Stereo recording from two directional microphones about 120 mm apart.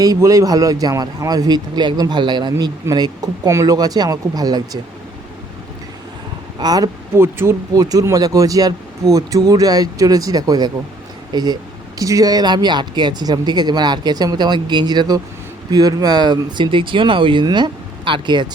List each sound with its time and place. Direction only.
0.0 s speech: 30° right (ahead or behind)
6.6 s speech: 35° right (ahead or behind)
7.2 s speech: 20° right (ahead or behind)
7.7 s speech: 30° right (ahead or behind)